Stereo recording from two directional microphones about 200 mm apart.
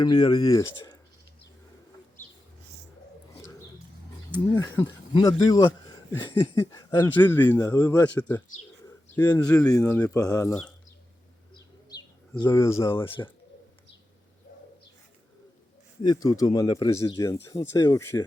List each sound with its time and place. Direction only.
0.0 s speech: 20° left (ahead or behind)
4.5 s speech: 15° left (ahead or behind)
9.2 s speech: 20° left (ahead or behind)
11.5 s bird: 20° left (ahead or behind)
12.4 s speech: 15° left (ahead or behind)
16.0 s speech: 15° left (ahead or behind)